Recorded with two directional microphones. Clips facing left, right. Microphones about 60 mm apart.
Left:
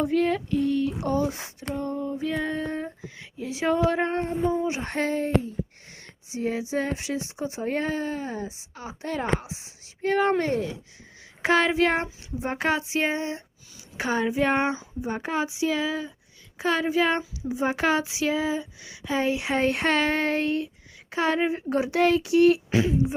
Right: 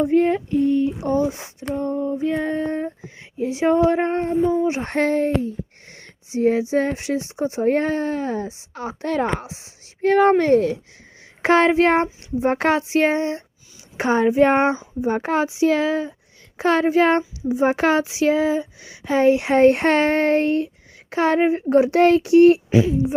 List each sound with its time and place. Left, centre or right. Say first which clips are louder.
0.0 s a sound: right 6 dB; right
3.0 s speech: right 9 dB; right
4.6 s speech: right 6 dB; right
11.4 s speech: right 6 dB; right
13.9 s speech: right 8 dB; right
17.5 s speech: right 6 dB; right
22.7 s speech: right 6 dB; centre